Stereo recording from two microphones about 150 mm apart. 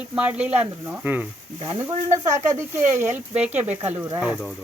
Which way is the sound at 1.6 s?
25° right (ahead or behind).